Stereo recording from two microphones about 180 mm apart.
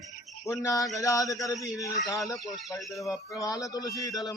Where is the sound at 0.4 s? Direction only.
15° left (ahead or behind).